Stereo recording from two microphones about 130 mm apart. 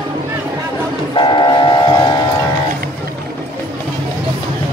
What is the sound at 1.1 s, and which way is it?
Train, 40° left (ahead or behind).